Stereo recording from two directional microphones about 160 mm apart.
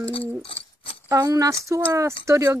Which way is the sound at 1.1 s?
20° right (ahead or behind).